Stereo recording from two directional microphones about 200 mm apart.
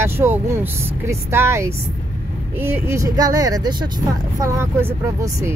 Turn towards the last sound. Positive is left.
turn(degrees=-15)  # may be behind; listen again after turning